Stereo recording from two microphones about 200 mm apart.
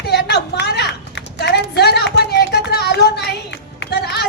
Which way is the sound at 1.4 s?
55° left (ahead or behind).